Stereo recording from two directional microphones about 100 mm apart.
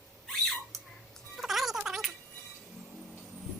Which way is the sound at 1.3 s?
Centre (ahead or behind).